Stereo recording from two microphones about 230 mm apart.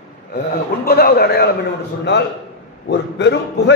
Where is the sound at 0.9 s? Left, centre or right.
Left.